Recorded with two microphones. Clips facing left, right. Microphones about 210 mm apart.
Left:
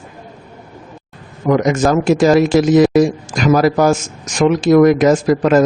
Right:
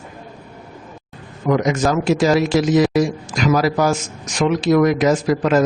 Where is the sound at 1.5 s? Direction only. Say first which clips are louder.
Left 4 dB; 50° left (ahead or behind).